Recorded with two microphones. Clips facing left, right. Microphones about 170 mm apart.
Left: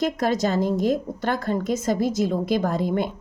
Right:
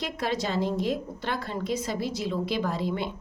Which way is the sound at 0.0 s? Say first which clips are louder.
Left 7 dB; 45° left (ahead or behind).